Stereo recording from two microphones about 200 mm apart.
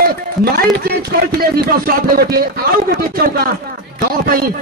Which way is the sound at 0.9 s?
50° right (ahead or behind).